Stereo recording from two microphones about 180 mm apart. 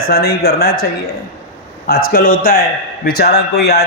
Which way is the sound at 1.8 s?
55° left (ahead or behind).